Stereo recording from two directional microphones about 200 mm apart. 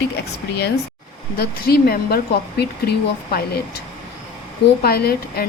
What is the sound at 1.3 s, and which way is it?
A woman's voice, 50° left (ahead or behind).